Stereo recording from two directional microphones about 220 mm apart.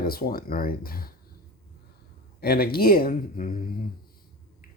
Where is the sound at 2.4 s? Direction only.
45° left (ahead or behind).